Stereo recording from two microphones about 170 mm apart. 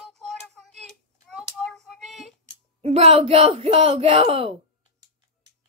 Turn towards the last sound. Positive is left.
turn(degrees=-35)  # may be behind; listen again after turning